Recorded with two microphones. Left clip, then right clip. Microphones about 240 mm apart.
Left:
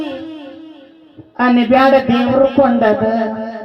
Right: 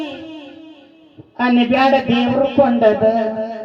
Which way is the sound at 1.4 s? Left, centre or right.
Left.